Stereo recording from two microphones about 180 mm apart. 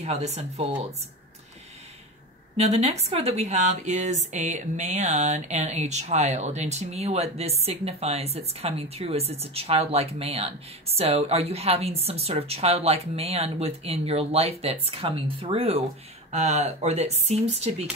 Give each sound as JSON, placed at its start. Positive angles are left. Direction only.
{"t": 0.0, "sound": "speech", "side_deg": -40}
{"t": 2.5, "sound": "speech", "side_deg": -35}